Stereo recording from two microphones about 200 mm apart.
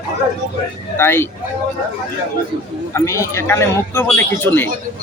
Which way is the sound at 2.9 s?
15° left (ahead or behind).